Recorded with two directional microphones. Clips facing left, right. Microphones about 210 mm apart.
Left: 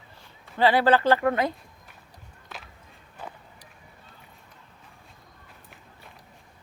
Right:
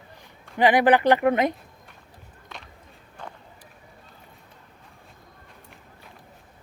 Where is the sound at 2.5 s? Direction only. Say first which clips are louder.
Even; centre (ahead or behind).